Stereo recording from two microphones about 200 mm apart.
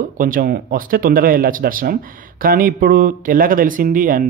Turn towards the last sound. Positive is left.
turn(degrees=-40)  # may be behind; listen again after turning